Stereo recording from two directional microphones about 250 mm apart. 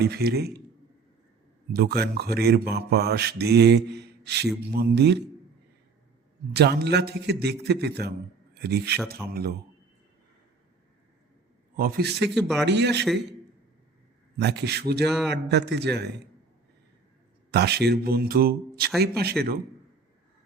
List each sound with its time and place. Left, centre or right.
0.0 s speech: right
1.7 s speech: right
6.5 s speech: right
11.8 s a man's voice: right
14.3 s speech: right
17.5 s speech: right